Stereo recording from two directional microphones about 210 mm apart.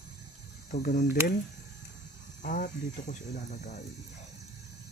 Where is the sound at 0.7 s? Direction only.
35° left (ahead or behind).